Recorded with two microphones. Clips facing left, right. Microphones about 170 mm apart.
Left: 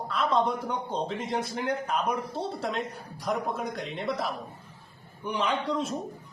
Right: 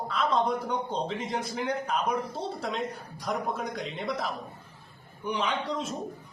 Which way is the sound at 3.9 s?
Centre (ahead or behind).